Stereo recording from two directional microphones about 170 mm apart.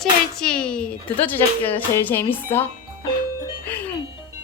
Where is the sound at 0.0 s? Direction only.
5° left (ahead or behind).